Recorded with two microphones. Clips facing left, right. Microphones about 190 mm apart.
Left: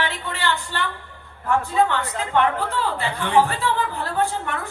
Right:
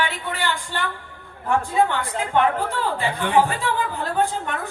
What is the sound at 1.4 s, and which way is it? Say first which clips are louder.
A man's voice: even; 15° right (ahead or behind).